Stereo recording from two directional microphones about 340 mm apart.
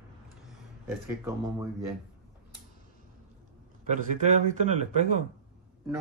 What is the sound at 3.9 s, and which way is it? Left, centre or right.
Speech, centre.